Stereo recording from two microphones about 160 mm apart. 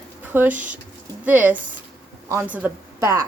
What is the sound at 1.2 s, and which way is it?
A woman's voice, 10° right (ahead or behind).